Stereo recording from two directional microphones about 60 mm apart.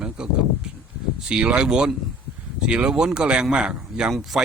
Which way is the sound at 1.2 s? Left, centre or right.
Centre.